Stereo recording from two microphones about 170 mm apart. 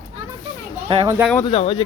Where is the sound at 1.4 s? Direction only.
30° left (ahead or behind).